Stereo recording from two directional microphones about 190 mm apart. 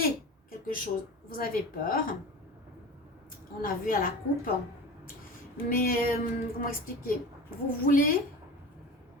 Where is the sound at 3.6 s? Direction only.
50° left (ahead or behind).